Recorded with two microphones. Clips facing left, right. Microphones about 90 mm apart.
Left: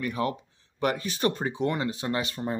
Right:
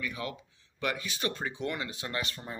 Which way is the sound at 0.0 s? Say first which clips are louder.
Left 8 dB; 40° left (ahead or behind).